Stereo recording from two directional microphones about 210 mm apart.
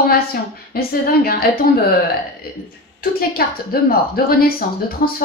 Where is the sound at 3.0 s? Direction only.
45° left (ahead or behind).